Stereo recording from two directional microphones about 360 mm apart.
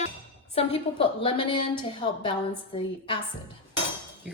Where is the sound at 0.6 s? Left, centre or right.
Centre.